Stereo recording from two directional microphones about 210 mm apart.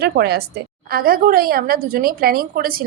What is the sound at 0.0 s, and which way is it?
A woman's voice, 50° right (ahead or behind).